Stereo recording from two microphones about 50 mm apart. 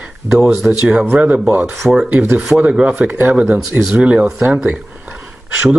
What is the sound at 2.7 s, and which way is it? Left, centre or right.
Speech, right.